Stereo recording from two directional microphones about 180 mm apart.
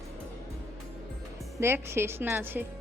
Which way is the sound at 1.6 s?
15° right (ahead or behind).